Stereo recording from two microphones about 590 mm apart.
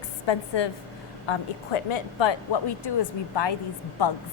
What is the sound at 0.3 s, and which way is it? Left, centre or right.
A woman's voice, left.